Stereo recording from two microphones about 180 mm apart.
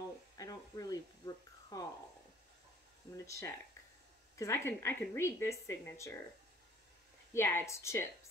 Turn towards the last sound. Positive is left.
turn(degrees=15)  # may be behind; listen again after turning